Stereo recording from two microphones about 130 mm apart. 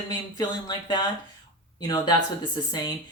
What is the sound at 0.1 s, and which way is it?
Speech, 35° left (ahead or behind).